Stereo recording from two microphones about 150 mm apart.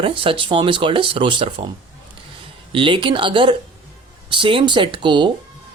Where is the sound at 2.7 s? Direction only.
35° right (ahead or behind).